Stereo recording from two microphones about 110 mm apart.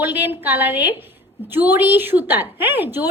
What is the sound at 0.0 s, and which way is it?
A woman's voice, 15° right (ahead or behind).